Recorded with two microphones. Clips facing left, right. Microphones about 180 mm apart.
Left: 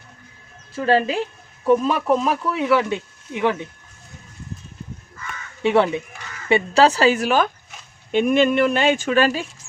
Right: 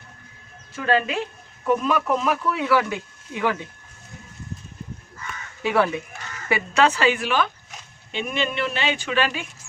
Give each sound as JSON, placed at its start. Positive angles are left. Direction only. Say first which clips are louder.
{"t": 0.7, "sound": "a woman's voice", "louder": "left 4 dB", "side_deg": 30}
{"t": 5.6, "sound": "speech", "louder": "left 4 dB", "side_deg": 25}
{"t": 6.5, "sound": "a woman's voice", "louder": "left 4 dB", "side_deg": 35}